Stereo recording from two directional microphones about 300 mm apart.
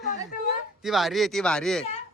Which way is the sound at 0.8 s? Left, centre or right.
Centre.